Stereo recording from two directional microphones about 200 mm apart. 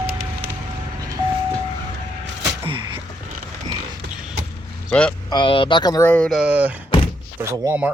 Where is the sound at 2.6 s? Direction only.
25° right (ahead or behind).